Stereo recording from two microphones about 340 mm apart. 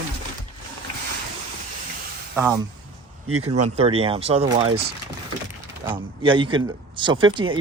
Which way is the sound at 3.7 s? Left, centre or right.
Centre.